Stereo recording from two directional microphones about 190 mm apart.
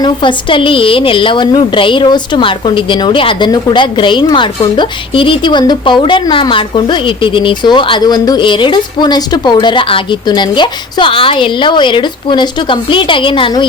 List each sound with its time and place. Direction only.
0.0 s a woman's voice: 25° left (ahead or behind)